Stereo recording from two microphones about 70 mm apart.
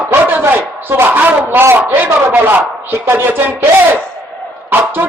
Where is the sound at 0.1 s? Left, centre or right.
Right.